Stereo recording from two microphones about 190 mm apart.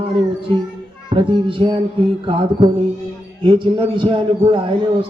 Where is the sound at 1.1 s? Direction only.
25° right (ahead or behind).